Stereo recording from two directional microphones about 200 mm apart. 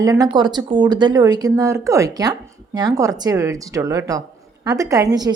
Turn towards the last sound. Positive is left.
turn(degrees=-15)  # may be behind; listen again after turning